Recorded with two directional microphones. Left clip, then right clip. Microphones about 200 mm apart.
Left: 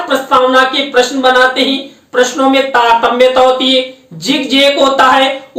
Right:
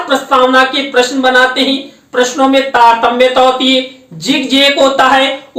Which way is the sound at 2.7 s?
5° right (ahead or behind).